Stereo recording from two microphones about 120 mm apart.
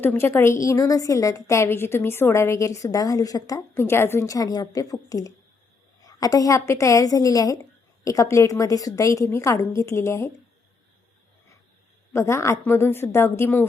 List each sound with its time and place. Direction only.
0.0 s a woman's voice: 20° left (ahead or behind)
12.1 s a woman's voice: 25° left (ahead or behind)